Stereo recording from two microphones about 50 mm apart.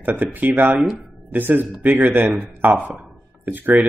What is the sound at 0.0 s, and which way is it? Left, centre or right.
Speech, right.